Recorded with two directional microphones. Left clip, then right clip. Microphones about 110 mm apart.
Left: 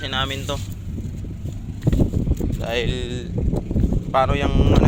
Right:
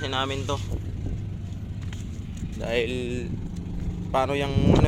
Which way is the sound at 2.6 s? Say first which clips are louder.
Left 1 dB; 35° right (ahead or behind).